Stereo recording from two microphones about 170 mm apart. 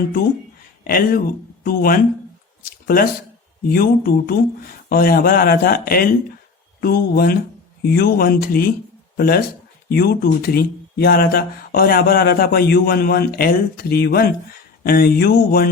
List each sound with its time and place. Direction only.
0.9 s speech: 55° left (ahead or behind)
2.6 s a sound: 60° left (ahead or behind)
3.7 s speech: 65° left (ahead or behind)